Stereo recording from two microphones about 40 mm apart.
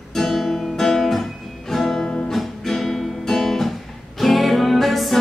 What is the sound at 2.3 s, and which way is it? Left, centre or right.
Music, centre.